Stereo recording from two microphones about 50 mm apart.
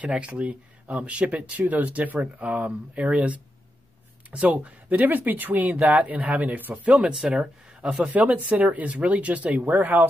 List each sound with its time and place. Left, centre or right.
0.0 s speech: right
7.1 s speech: centre; by 10.0 s right